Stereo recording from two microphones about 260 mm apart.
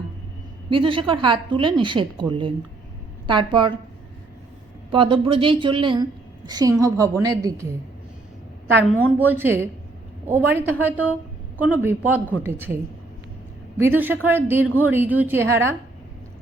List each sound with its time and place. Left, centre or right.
0.7 s a woman's voice: centre
4.9 s a woman's voice: centre
9.1 s a woman's voice: centre
13.7 s a woman's voice: centre